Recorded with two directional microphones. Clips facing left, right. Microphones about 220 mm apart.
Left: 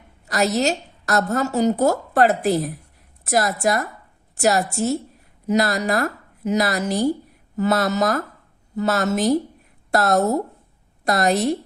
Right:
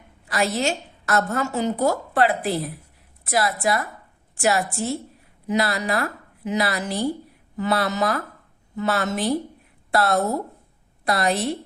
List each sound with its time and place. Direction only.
0.3 s a woman's voice: 40° left (ahead or behind)